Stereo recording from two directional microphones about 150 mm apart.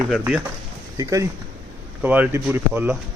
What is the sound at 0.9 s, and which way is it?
Speech, 25° right (ahead or behind).